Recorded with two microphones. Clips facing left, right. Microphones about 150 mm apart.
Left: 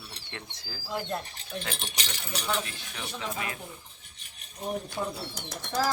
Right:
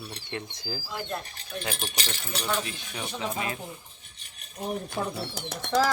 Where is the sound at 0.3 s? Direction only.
15° right (ahead or behind).